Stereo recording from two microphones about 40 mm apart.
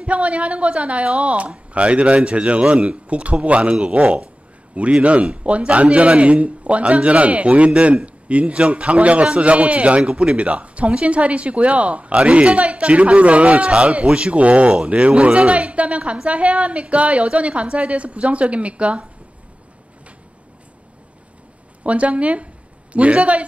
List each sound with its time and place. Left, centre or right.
0.0 s a man's voice: right
21.8 s a man's voice: right